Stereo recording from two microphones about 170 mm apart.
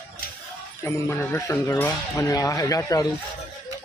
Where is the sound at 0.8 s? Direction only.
15° left (ahead or behind).